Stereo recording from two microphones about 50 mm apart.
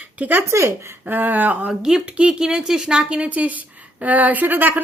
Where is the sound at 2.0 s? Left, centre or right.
Right.